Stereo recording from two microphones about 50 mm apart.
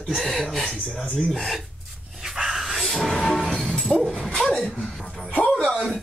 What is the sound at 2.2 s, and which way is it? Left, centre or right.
Dog, centre.